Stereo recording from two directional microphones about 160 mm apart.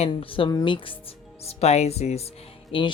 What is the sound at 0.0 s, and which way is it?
Speech, 35° left (ahead or behind).